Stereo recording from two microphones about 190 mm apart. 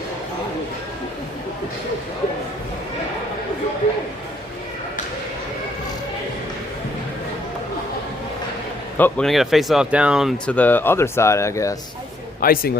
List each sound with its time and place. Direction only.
9.0 s speech: 10° left (ahead or behind)
12.4 s a man's voice: 50° left (ahead or behind)